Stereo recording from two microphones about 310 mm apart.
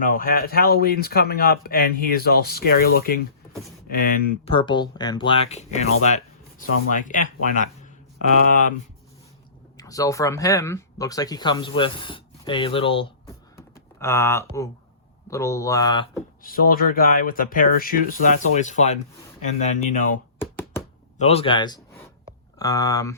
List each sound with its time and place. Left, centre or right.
0.0 s speech: left
4.5 s speech: centre
9.7 s speech: centre
13.6 s computer keyboard: centre
15.3 s speech: centre
16.4 s speech: left
20.4 s hands: centre
21.2 s speech: centre